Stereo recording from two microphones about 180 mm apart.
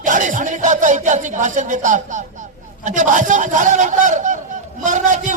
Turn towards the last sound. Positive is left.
turn(degrees=-45)  # may be behind; listen again after turning